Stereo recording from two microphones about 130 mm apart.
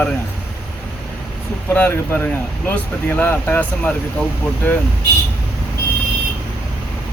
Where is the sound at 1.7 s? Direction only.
15° left (ahead or behind).